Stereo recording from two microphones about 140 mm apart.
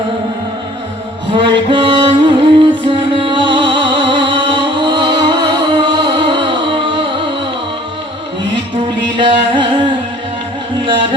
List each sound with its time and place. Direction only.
1.3 s music: 35° right (ahead or behind)
9.1 s music: 35° right (ahead or behind)